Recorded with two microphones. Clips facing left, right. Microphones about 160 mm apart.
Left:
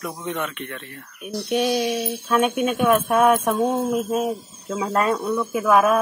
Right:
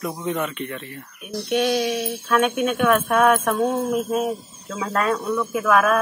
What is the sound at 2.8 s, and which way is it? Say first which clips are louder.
Speech: left 1 dB; 20° left (ahead or behind).